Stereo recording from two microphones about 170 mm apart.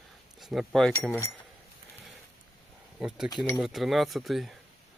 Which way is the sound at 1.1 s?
15° left (ahead or behind).